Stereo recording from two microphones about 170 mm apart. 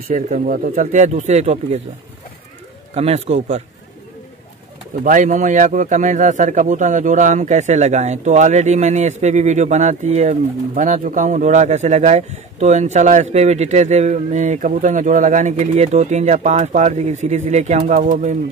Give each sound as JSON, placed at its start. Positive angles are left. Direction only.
{"t": 0.1, "sound": "a man's voice", "side_deg": -50}
{"t": 2.9, "sound": "a man's voice", "side_deg": -35}
{"t": 5.0, "sound": "a man's voice", "side_deg": -50}